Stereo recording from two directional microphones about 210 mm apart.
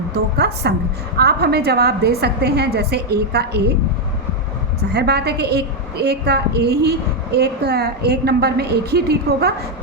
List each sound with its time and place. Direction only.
0.1 s a woman's voice: 50° right (ahead or behind)
4.9 s a woman's voice: 50° right (ahead or behind)